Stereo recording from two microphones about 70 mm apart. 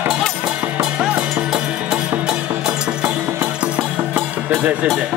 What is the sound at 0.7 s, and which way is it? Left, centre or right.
Music, centre.